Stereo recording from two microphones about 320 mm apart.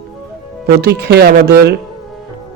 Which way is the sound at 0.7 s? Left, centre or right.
Right.